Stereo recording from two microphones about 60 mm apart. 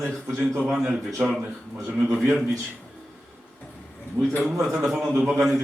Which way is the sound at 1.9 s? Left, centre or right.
Centre.